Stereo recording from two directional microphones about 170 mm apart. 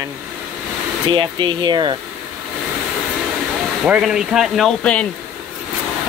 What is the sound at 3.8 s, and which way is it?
Speech, 5° right (ahead or behind).